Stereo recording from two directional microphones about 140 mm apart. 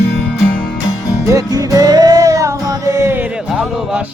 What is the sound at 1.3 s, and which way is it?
Music, 25° right (ahead or behind).